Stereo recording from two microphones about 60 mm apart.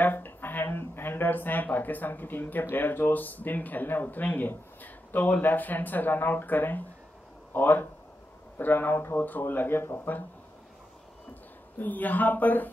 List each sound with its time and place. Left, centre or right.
0.0 s speech: left
11.8 s speech: left